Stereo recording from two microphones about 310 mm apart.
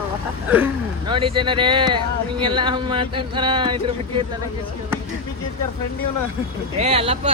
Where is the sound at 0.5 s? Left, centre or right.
Centre.